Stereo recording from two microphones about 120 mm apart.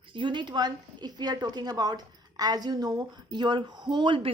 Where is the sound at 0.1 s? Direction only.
45° right (ahead or behind).